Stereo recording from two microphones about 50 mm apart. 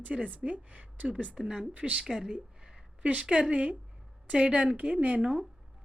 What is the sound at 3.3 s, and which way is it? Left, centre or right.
A woman's voice, right.